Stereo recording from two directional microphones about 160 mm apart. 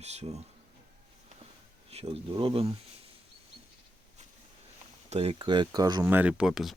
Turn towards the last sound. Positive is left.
turn(degrees=0)  # may be behind; listen again after turning